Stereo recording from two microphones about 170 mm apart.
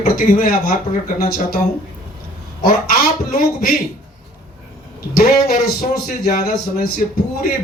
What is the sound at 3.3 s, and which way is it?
Speech, 55° left (ahead or behind).